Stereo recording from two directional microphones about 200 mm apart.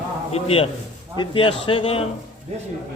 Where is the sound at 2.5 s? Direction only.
30° right (ahead or behind).